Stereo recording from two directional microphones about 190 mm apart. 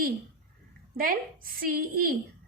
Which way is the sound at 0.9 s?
45° right (ahead or behind).